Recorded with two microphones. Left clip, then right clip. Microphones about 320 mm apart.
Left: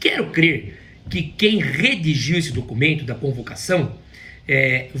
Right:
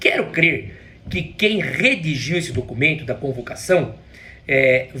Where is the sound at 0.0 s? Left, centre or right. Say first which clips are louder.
Right 1 dB; centre.